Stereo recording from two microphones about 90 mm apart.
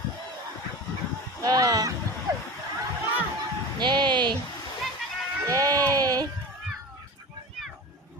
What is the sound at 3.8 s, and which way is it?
Music, 55° right (ahead or behind).